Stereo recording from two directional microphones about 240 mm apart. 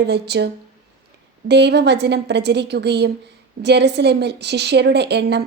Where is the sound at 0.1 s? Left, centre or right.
Right.